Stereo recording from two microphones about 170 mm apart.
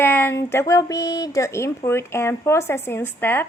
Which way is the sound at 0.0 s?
15° left (ahead or behind).